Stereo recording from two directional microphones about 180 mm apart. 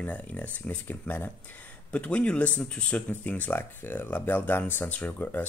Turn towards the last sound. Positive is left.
turn(degrees=10)  # may be behind; listen again after turning